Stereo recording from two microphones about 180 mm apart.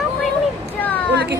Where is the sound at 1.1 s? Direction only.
65° right (ahead or behind).